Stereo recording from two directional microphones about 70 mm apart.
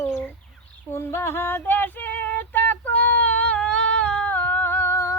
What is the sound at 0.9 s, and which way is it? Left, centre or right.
Female singing, left.